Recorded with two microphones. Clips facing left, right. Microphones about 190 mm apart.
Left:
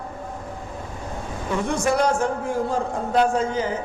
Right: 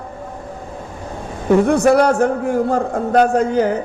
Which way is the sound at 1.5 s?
60° right (ahead or behind).